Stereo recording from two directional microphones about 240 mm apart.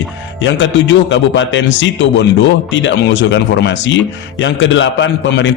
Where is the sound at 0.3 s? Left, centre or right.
Left.